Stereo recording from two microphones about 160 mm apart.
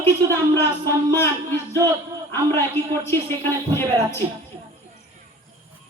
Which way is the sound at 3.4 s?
15° left (ahead or behind).